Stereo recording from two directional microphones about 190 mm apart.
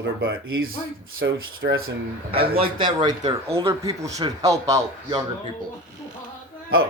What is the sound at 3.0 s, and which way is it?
A man's voice, 20° right (ahead or behind).